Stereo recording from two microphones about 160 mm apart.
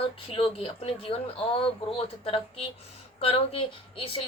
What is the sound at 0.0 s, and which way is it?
Speech, 35° left (ahead or behind).